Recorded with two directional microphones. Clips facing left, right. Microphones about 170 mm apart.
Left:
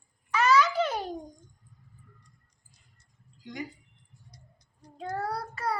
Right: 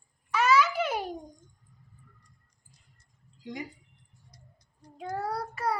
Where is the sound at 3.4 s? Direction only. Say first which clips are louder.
Even; 25° right (ahead or behind).